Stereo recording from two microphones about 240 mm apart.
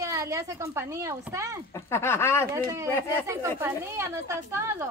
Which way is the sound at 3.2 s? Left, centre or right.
Centre.